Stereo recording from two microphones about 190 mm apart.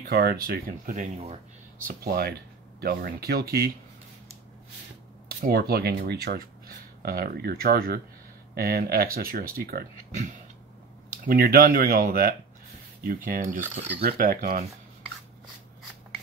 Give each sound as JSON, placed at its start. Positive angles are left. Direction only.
{"t": 0.1, "sound": "speech", "side_deg": -55}
{"t": 1.9, "sound": "speech", "side_deg": -55}
{"t": 5.4, "sound": "speech", "side_deg": -55}
{"t": 11.2, "sound": "speech", "side_deg": -50}